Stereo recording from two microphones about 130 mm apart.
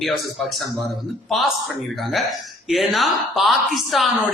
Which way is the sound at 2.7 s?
Centre (ahead or behind).